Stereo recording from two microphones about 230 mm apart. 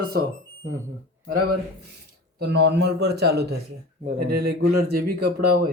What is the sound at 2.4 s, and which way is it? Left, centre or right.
A man's voice, right.